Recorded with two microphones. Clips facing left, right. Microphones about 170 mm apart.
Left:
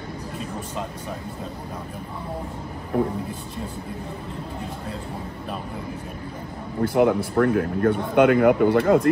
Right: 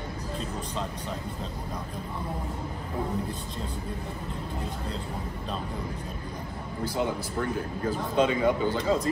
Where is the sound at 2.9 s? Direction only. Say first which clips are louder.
Left 10 dB; 70° left (ahead or behind).